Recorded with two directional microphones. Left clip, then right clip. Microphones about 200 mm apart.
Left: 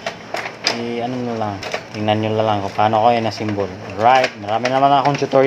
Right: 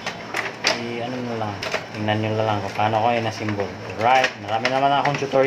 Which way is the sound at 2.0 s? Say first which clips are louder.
Left 6 dB; 55° left (ahead or behind).